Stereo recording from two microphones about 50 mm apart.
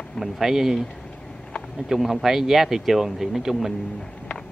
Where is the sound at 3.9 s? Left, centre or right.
Left.